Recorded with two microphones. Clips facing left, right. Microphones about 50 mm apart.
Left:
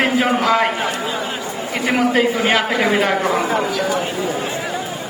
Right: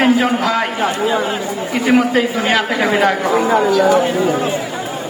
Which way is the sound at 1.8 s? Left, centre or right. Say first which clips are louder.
Right 2 dB; centre.